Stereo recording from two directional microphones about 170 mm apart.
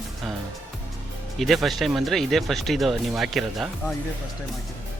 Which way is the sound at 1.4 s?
Centre (ahead or behind).